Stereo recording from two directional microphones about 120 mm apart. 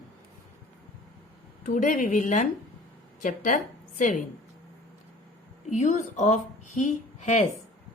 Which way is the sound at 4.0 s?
90° left.